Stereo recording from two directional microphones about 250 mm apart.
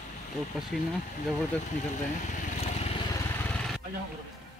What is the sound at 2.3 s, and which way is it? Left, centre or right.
Vehicle, left.